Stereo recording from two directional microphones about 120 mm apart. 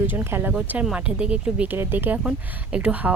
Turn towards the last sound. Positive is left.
turn(degrees=-10)  # may be behind; listen again after turning